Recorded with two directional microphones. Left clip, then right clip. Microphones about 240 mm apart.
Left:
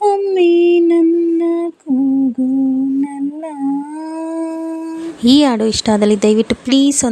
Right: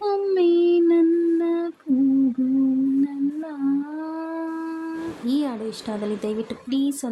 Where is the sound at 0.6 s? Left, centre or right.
Centre.